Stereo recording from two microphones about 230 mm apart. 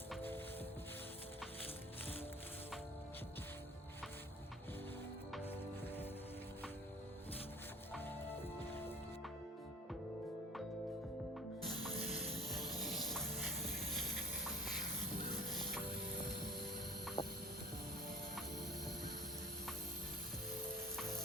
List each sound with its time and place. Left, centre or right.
0.1 s music: centre
7.9 s music: centre
11.6 s music: centre
14.4 s a sound: centre
15.4 s music: centre
17.2 s a sound: centre